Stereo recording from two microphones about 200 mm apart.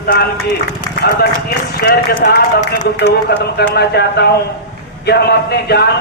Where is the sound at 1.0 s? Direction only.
55° left (ahead or behind).